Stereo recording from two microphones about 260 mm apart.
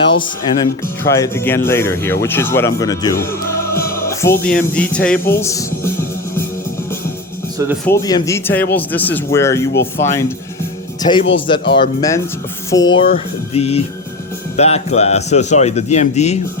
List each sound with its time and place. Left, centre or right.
0.0 s speech: centre
7.9 s speech: centre
12.7 s speech: left
13.1 s speech: left